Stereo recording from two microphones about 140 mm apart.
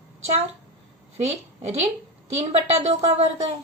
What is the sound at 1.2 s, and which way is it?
A woman's voice, 50° right (ahead or behind).